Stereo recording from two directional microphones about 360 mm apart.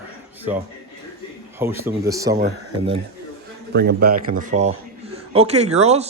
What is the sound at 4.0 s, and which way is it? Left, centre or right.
Speech, right.